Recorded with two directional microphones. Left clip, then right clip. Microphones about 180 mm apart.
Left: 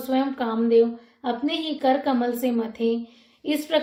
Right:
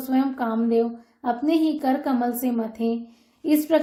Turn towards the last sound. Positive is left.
turn(degrees=-45)  # may be behind; listen again after turning